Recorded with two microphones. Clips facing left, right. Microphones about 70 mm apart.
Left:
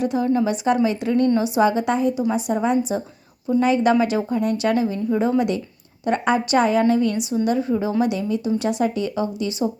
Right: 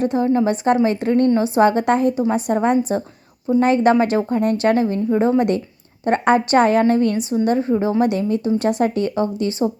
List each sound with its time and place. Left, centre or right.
0.0 s a woman's voice: right